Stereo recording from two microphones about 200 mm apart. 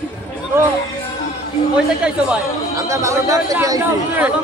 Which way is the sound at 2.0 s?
5° right (ahead or behind).